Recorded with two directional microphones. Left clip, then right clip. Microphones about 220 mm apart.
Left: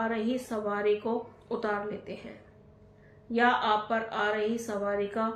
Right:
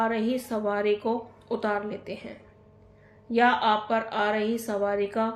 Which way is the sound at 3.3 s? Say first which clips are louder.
Right 3 dB; 45° right (ahead or behind).